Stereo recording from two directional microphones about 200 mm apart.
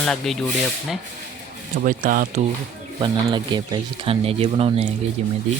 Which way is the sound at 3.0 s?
20° right (ahead or behind).